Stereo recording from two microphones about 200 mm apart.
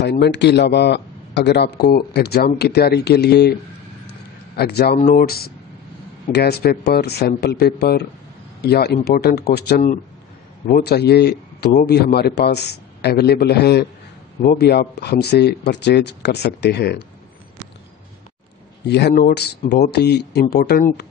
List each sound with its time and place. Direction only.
0.0 s a man's voice: 55° left (ahead or behind)
4.6 s a man's voice: 55° left (ahead or behind)
18.9 s a man's voice: 60° left (ahead or behind)